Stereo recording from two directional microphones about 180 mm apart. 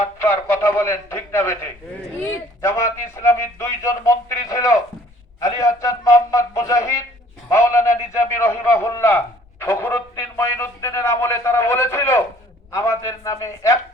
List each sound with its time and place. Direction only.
0.0 s a man's voice: 15° left (ahead or behind)